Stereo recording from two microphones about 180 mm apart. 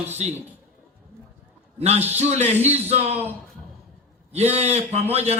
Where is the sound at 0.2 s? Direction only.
40° right (ahead or behind).